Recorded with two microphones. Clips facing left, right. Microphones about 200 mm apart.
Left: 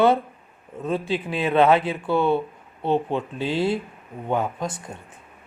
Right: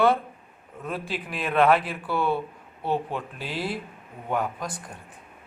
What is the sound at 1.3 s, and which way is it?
A woman's voice, 25° left (ahead or behind).